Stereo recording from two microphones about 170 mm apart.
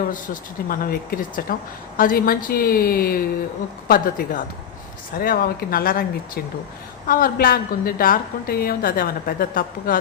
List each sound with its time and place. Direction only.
0.7 s a woman's voice: 55° left (ahead or behind)